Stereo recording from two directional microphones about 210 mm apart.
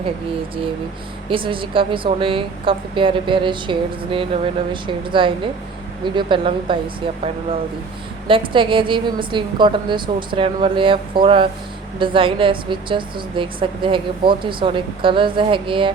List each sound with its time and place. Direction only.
1.3 s a woman's voice: 25° right (ahead or behind)
8.3 s a woman's voice: 25° right (ahead or behind)